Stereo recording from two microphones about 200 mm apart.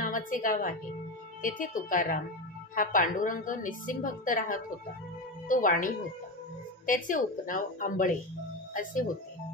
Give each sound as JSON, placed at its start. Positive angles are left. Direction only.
{"t": 0.0, "sound": "a woman's voice", "side_deg": 40}